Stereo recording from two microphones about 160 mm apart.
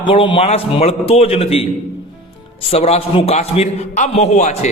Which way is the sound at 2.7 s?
40° left (ahead or behind).